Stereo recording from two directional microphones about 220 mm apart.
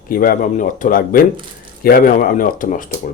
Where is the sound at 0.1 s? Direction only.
40° left (ahead or behind).